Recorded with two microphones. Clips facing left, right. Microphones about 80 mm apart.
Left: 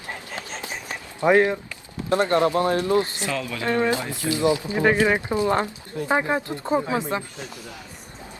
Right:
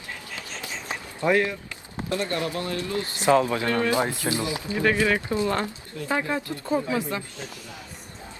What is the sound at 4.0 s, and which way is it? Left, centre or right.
Speech, right.